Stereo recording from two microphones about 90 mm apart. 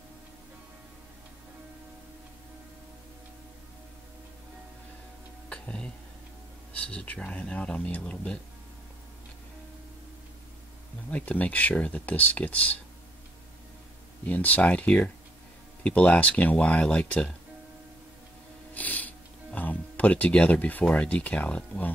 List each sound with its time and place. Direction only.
5.5 s a sound: 10° left (ahead or behind)
6.7 s speech: 15° left (ahead or behind)
11.1 s speech: 15° left (ahead or behind)
14.2 s speech: 15° left (ahead or behind)
18.8 s speech: 20° left (ahead or behind)